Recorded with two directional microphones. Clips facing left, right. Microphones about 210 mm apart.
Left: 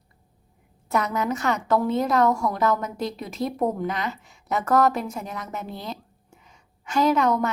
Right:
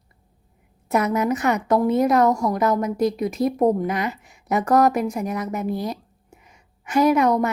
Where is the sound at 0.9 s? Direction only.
20° right (ahead or behind).